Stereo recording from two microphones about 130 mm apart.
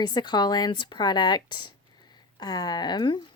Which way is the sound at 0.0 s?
35° left (ahead or behind).